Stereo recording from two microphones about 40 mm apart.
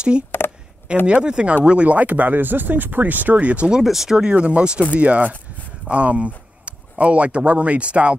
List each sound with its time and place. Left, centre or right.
0.4 s a sound: left
1.0 s speech: right
2.3 s speech: right
3.8 s speech: centre
4.3 s speech: right
5.9 s speech: right